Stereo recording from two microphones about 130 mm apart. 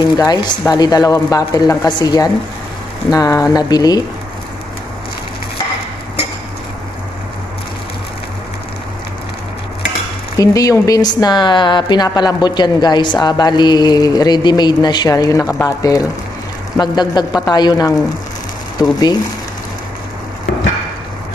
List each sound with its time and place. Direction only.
0.2 s speech: 30° left (ahead or behind)
10.3 s speech: 25° left (ahead or behind)